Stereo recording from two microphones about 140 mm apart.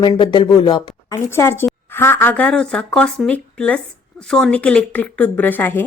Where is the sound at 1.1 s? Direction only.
20° left (ahead or behind).